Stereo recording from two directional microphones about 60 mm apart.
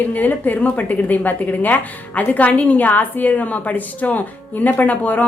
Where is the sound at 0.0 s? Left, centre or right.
Left.